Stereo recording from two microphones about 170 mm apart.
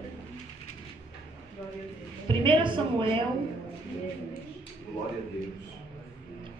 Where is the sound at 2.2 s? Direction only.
30° right (ahead or behind).